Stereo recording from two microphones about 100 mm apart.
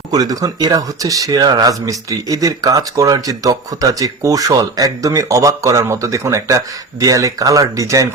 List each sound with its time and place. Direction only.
0.1 s speech: 40° right (ahead or behind)